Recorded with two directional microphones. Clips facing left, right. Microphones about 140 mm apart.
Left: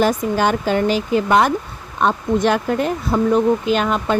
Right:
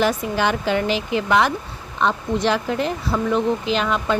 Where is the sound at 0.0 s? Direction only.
45° left (ahead or behind).